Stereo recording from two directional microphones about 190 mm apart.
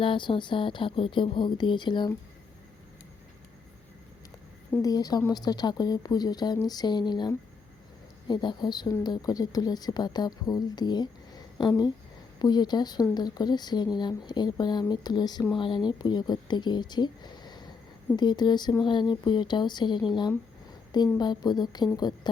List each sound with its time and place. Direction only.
0.0 s speech: 25° left (ahead or behind)
4.7 s speech: 20° left (ahead or behind)